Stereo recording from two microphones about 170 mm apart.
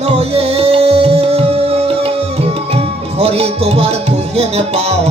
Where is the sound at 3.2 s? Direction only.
35° right (ahead or behind).